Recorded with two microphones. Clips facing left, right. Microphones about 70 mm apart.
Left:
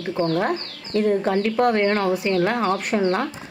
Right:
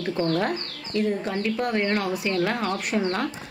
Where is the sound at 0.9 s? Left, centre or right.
Left.